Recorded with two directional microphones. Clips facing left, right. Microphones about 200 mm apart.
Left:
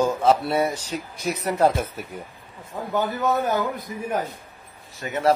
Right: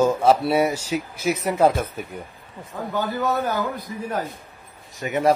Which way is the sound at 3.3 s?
20° left (ahead or behind).